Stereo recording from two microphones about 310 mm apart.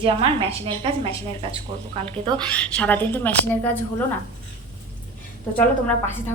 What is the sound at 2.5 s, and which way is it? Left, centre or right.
A woman's voice, centre.